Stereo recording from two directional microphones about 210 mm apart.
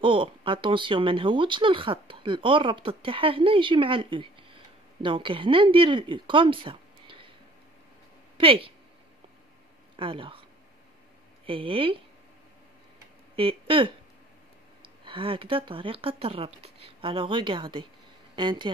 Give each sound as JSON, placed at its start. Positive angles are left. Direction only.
{"t": 0.0, "sound": "speech", "side_deg": -25}
{"t": 8.4, "sound": "speech", "side_deg": -25}
{"t": 9.9, "sound": "speech", "side_deg": -25}
{"t": 11.4, "sound": "speech", "side_deg": -25}
{"t": 13.4, "sound": "speech", "side_deg": -25}